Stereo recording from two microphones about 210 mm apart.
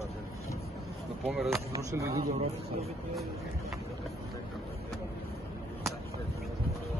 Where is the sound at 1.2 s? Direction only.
Centre (ahead or behind).